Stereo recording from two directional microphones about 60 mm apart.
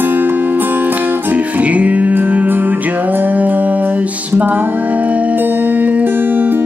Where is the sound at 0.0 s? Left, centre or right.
Right.